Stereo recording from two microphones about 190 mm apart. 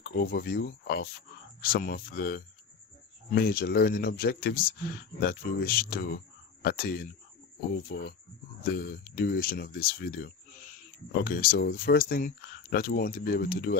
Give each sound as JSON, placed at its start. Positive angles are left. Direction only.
{"t": 0.2, "sound": "speech", "side_deg": 55}